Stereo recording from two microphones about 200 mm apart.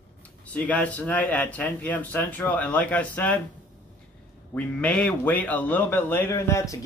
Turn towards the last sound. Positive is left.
turn(degrees=15)  # may be behind; listen again after turning